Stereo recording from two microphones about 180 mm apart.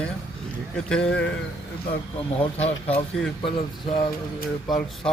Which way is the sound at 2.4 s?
35° left (ahead or behind).